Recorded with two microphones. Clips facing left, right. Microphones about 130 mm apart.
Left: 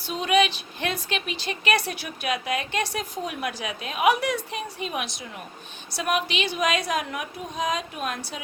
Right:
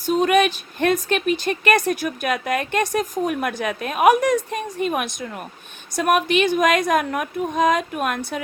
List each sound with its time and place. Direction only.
0.0 s a woman's voice: 45° right (ahead or behind)